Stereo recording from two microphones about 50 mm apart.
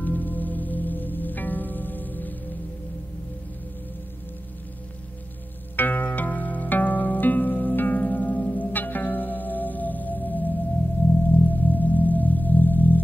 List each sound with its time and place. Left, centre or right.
0.0 s music: left
5.8 s music: left